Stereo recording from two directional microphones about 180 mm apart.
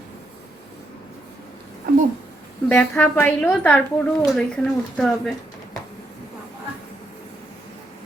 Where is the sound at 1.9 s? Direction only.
55° right (ahead or behind).